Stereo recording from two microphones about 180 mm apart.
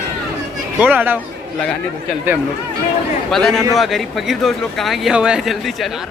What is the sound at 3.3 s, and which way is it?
Speech, centre (ahead or behind).